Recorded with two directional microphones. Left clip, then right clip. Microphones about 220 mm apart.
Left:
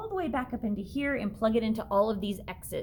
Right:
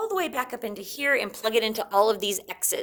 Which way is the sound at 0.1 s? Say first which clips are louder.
Right 5 dB; 35° right (ahead or behind).